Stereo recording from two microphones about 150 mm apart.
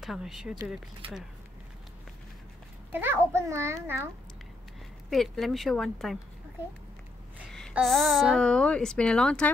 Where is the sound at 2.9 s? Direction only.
15° right (ahead or behind).